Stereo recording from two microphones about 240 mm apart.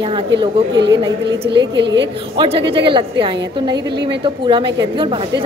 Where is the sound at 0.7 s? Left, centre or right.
Right.